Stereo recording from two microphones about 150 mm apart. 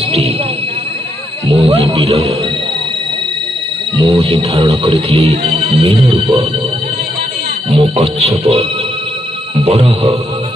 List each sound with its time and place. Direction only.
1.5 s speech: 40° right (ahead or behind)
4.0 s speech: 40° right (ahead or behind)
7.7 s a man's voice: 40° right (ahead or behind)